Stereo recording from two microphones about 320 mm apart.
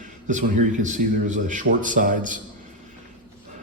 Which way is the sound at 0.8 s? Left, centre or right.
Right.